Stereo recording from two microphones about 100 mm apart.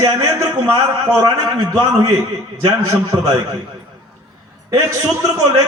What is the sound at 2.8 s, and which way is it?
Speech, 35° right (ahead or behind).